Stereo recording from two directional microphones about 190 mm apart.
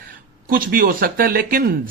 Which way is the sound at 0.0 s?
50° right (ahead or behind).